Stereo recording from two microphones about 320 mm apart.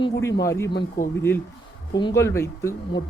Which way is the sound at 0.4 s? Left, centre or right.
Centre.